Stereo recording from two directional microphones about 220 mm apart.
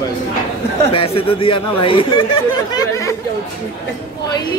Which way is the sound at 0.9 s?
25° left (ahead or behind).